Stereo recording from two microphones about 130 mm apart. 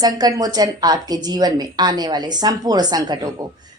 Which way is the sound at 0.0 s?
30° right (ahead or behind).